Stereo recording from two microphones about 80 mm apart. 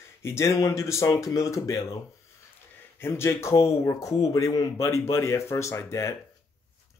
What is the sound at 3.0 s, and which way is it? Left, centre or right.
Speech, left.